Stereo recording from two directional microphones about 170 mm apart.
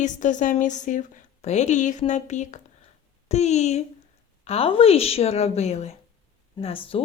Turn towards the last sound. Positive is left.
turn(degrees=35)  # may be behind; listen again after turning